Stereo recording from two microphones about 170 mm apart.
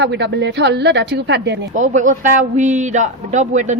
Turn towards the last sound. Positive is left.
turn(degrees=-45)  # may be behind; listen again after turning